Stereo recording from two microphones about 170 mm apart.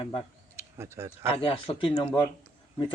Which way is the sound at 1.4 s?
30° left (ahead or behind).